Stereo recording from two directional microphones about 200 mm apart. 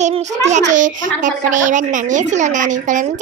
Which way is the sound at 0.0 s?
35° right (ahead or behind).